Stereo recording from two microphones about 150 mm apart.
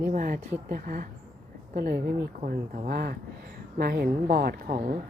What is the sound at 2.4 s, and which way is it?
Speech, 70° right (ahead or behind).